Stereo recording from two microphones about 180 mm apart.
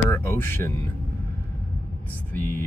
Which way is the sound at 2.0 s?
10° left (ahead or behind).